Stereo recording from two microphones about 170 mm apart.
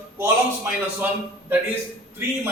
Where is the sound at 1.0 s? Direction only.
10° right (ahead or behind).